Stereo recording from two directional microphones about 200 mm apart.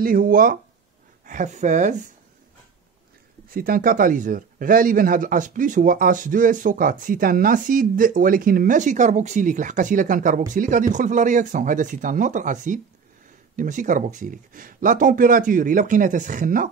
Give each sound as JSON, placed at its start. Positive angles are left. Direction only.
{"t": 0.0, "sound": "speech", "side_deg": -45}
{"t": 3.4, "sound": "speech", "side_deg": -45}